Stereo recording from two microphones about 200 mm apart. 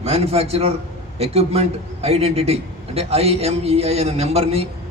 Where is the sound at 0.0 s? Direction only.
30° right (ahead or behind).